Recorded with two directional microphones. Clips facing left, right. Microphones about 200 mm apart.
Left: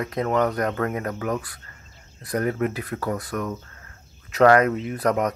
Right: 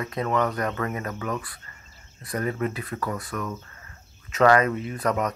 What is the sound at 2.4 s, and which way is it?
Speech, 60° left (ahead or behind).